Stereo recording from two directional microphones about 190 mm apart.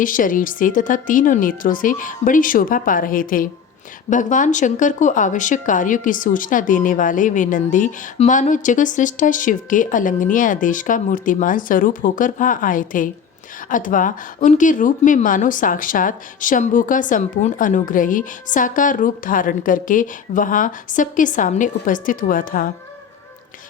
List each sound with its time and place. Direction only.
0.0 s speech: 45° left (ahead or behind)